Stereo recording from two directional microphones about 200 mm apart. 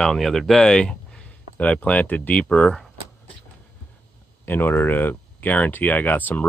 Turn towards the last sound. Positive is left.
turn(degrees=10)  # may be behind; listen again after turning